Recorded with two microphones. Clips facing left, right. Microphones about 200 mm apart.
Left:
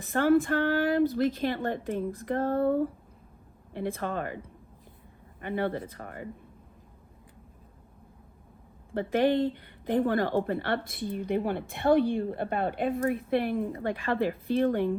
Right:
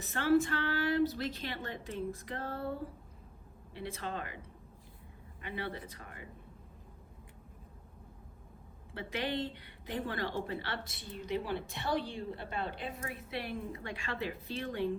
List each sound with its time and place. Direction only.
0.0 s a woman's voice: 50° left (ahead or behind)
5.4 s a woman's voice: 50° left (ahead or behind)
8.9 s a woman's voice: 50° left (ahead or behind)